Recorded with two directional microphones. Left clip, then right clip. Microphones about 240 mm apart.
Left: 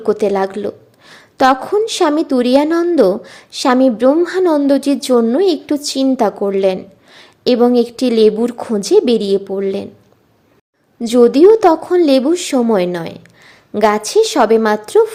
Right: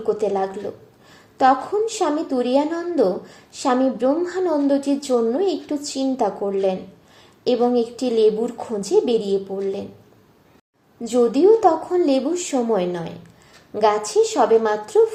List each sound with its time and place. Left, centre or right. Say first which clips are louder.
0.0 s a woman's voice: left 6 dB; left
11.0 s a woman's voice: left 8 dB; left